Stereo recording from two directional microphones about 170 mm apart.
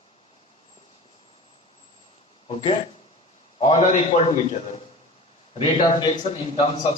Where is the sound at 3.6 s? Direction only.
35° left (ahead or behind).